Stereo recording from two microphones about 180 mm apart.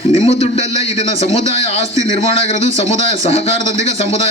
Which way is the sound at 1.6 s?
35° left (ahead or behind).